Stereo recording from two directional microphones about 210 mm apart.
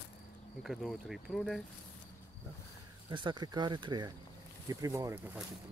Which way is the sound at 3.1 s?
25° right (ahead or behind).